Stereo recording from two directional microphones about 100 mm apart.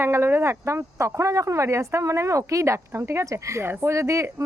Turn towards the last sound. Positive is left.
turn(degrees=-30)  # may be behind; listen again after turning